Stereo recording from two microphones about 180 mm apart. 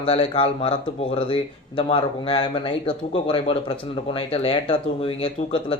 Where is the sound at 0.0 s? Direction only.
30° left (ahead or behind).